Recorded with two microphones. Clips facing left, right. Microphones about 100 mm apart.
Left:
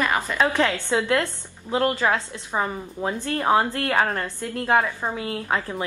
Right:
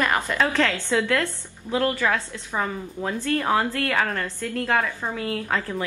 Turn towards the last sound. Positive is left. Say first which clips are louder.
# even
turn(degrees=25)  # may be behind; listen again after turning